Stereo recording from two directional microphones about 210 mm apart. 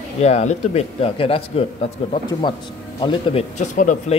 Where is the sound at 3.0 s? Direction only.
25° left (ahead or behind).